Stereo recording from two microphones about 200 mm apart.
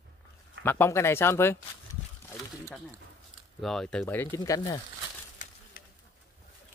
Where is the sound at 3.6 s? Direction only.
Centre (ahead or behind); by 4.8 s 15° left (ahead or behind).